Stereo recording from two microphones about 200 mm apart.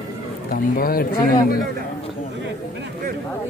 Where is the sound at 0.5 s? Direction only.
45° left (ahead or behind).